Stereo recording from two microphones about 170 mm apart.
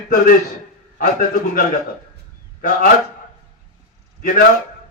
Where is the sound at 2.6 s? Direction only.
50° left (ahead or behind).